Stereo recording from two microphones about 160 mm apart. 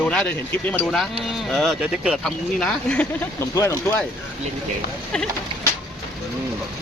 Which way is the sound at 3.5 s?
20° left (ahead or behind).